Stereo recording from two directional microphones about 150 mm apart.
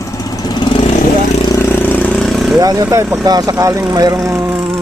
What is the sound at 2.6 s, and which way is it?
Speech, 25° right (ahead or behind).